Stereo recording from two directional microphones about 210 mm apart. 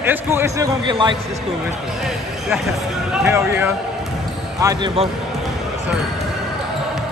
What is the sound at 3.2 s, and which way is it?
Speech, 10° right (ahead or behind).